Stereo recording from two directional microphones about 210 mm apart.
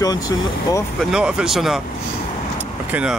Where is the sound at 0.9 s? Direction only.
Centre (ahead or behind).